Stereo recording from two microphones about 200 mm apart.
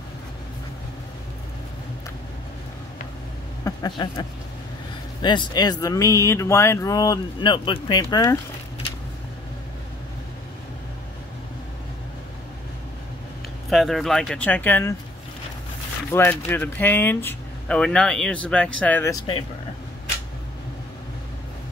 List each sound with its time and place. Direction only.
3.6 s speech: 20° left (ahead or behind)
13.7 s speech: centre (ahead or behind)
16.1 s speech: 10° left (ahead or behind)